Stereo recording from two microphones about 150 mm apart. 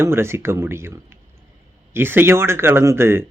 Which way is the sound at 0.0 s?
15° right (ahead or behind).